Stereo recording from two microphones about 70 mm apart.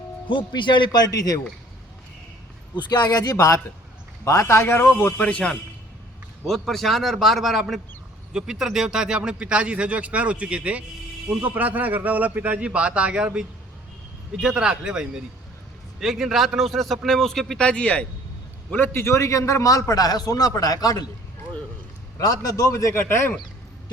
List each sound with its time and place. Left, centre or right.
0.5 s a man's voice: left
2.9 s a man's voice: left
4.9 s a man's voice: left
6.4 s a man's voice: centre
14.4 s a man's voice: centre
17.7 s a man's voice: centre
18.8 s a man's voice: left
19.9 s speech: left
22.2 s speech: left
23.0 s speech: left